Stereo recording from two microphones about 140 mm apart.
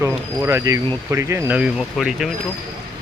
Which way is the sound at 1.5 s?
5° right (ahead or behind).